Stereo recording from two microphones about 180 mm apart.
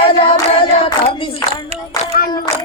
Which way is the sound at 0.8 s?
30° left (ahead or behind).